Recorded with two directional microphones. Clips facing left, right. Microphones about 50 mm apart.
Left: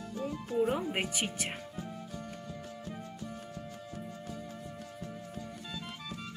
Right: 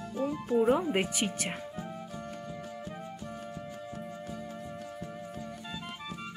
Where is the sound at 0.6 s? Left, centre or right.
Centre.